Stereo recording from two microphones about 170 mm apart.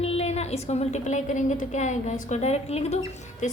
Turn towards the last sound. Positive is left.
turn(degrees=45)  # may be behind; listen again after turning